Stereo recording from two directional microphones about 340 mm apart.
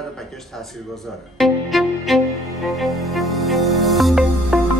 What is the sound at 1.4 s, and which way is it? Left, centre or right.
Music, centre.